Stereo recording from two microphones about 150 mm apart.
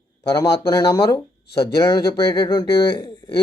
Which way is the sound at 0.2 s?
25° left (ahead or behind).